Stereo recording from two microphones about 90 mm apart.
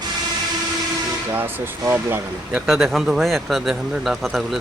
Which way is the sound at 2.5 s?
Centre (ahead or behind).